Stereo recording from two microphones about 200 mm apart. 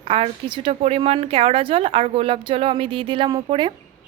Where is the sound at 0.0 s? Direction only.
25° right (ahead or behind).